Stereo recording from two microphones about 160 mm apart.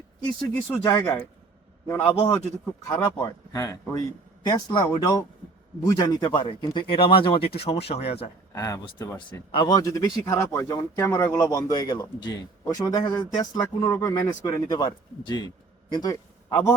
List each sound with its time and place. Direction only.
0.5 s speech: 15° left (ahead or behind)
2.1 s speech: 40° left (ahead or behind)
2.8 s speech: 20° left (ahead or behind); by 8.3 s 40° left (ahead or behind)
8.5 s speech: 20° left (ahead or behind)
9.5 s a man's voice: 30° left (ahead or behind)